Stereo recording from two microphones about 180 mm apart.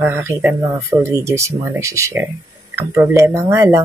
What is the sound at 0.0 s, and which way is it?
Speech, 15° right (ahead or behind).